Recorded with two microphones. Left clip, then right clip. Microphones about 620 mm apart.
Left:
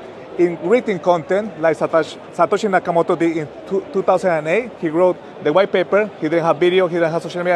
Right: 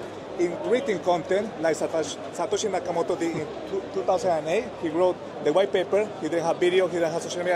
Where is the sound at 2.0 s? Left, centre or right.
Left.